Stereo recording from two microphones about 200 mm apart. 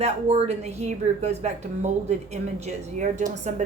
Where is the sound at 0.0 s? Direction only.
35° right (ahead or behind).